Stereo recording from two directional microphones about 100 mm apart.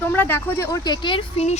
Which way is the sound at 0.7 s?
45° left (ahead or behind).